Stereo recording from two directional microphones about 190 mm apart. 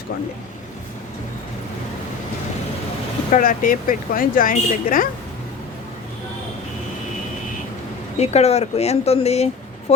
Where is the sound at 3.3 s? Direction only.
45° left (ahead or behind).